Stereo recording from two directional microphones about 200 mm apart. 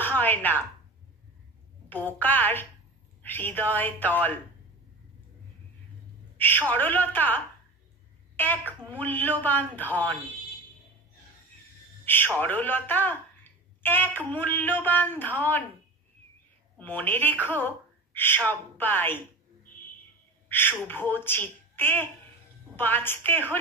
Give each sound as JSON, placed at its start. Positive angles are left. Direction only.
{"t": 0.0, "sound": "a woman's voice", "side_deg": 10}
{"t": 1.9, "sound": "speech", "side_deg": 10}
{"t": 6.3, "sound": "speech", "side_deg": 10}
{"t": 12.0, "sound": "a sound", "side_deg": 10}
{"t": 12.4, "sound": "speech", "side_deg": 10}
{"t": 16.7, "sound": "speech", "side_deg": 10}
{"t": 20.4, "sound": "gasp", "side_deg": 10}
{"t": 20.8, "sound": "speech", "side_deg": 10}